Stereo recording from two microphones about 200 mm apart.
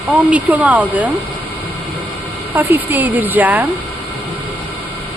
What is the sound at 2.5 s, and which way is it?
Speech, 10° right (ahead or behind).